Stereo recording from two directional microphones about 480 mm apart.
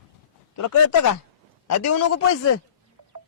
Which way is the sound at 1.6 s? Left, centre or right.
Left.